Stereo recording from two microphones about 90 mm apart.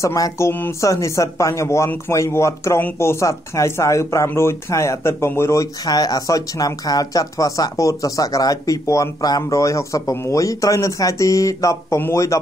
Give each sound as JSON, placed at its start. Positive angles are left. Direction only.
{"t": 0.0, "sound": "speech", "side_deg": 35}
{"t": 5.9, "sound": "speech", "side_deg": 45}